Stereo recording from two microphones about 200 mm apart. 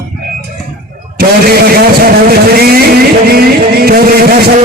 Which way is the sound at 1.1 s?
50° right (ahead or behind).